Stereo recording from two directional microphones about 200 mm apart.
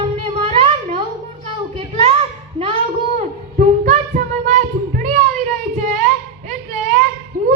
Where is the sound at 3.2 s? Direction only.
40° right (ahead or behind).